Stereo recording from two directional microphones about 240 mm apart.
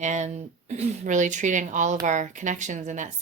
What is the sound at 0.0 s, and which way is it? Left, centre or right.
Speech, right.